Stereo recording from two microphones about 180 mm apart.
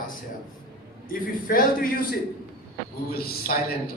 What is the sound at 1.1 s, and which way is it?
Speech, 50° left (ahead or behind).